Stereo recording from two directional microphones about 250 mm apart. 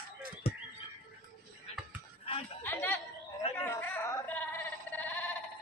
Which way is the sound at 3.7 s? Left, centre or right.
Centre.